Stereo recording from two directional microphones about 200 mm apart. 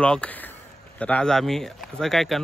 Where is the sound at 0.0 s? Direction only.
5° left (ahead or behind).